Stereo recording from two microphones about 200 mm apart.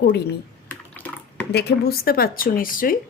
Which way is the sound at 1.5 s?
55° left (ahead or behind).